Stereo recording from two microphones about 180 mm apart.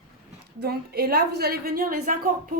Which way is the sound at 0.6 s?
60° right (ahead or behind).